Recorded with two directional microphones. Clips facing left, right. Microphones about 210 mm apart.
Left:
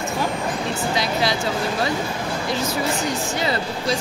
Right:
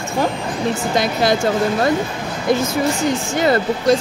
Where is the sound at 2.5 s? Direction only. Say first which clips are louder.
Right 8 dB; 50° right (ahead or behind).